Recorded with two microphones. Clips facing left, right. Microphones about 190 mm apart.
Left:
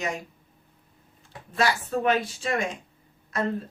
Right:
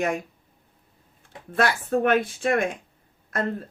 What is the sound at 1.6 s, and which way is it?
Speech, 55° right (ahead or behind).